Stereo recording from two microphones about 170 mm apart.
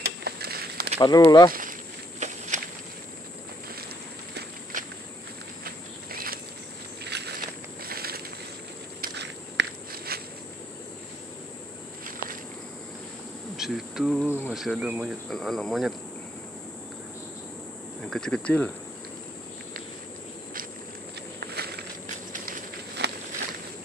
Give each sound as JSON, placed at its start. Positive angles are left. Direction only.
{"t": 0.0, "sound": "a sound", "side_deg": -70}
{"t": 0.9, "sound": "speech", "side_deg": 25}
{"t": 1.5, "sound": "walk", "side_deg": -50}
{"t": 4.7, "sound": "walk", "side_deg": -50}
{"t": 6.1, "sound": "insect", "side_deg": -60}
{"t": 7.1, "sound": "walk", "side_deg": -80}
{"t": 7.8, "sound": "a sound", "side_deg": -65}
{"t": 9.0, "sound": "biting", "side_deg": -90}
{"t": 13.6, "sound": "insect", "side_deg": 0}
{"t": 14.5, "sound": "speech", "side_deg": -5}
{"t": 18.0, "sound": "speech", "side_deg": 5}
{"t": 21.4, "sound": "walk", "side_deg": -70}